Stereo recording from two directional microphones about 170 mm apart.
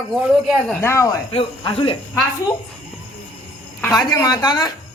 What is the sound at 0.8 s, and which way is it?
Speech, 15° left (ahead or behind).